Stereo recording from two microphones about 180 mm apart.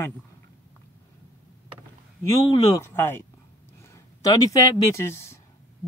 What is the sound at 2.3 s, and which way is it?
Speech, 20° left (ahead or behind).